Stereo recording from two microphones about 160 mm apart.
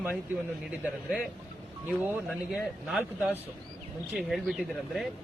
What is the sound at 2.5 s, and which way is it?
A man's voice, centre (ahead or behind).